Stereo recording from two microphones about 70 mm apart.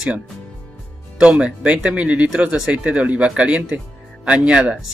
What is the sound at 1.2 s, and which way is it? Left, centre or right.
Speech, centre.